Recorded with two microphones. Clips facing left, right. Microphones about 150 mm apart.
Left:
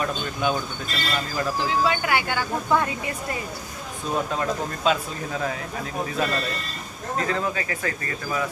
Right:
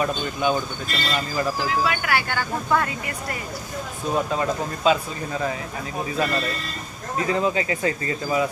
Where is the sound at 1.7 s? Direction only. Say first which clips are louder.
Left 1 dB; 25° left (ahead or behind).